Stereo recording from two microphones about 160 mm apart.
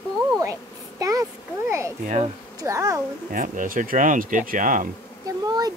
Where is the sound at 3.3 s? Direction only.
55° right (ahead or behind).